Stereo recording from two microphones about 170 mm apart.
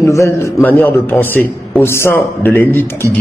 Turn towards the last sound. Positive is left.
turn(degrees=10)  # may be behind; listen again after turning